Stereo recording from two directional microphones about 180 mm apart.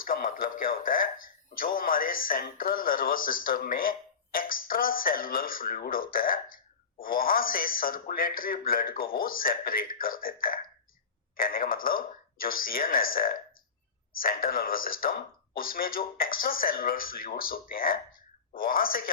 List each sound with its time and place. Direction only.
0.0 s speech: 50° left (ahead or behind)